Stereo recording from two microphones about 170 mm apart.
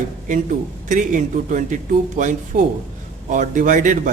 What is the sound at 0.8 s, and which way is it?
Speech, 50° right (ahead or behind).